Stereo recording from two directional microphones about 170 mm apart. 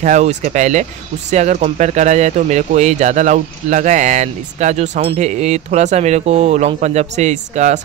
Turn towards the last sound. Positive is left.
turn(degrees=-45)  # may be behind; listen again after turning